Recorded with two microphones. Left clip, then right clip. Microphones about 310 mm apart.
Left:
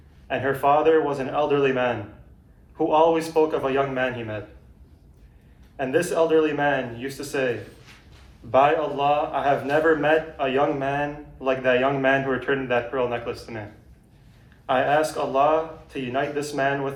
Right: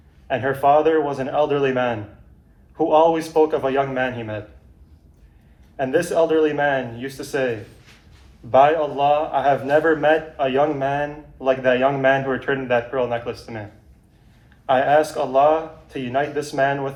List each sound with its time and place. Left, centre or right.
0.3 s a man's voice: centre
5.7 s a man's voice: centre
14.7 s a man's voice: centre